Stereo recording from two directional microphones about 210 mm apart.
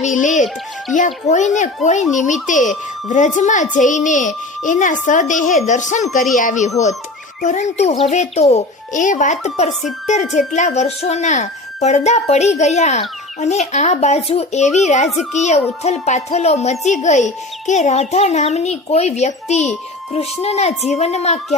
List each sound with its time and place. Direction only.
0.0 s a child's voice: 35° left (ahead or behind)